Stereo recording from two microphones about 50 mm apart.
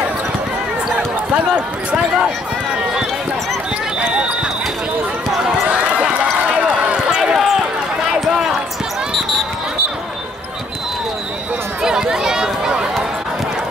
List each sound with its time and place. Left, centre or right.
4.0 s basketball bounce: right
5.7 s run: right
6.9 s run: centre
11.8 s run: centre